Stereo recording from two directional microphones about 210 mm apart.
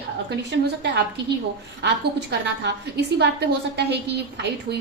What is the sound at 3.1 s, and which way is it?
Speech, 50° right (ahead or behind).